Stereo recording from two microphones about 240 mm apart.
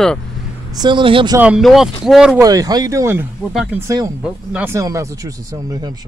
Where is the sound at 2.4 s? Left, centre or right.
Centre.